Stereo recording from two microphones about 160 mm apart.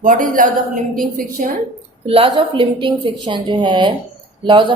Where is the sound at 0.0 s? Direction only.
55° right (ahead or behind).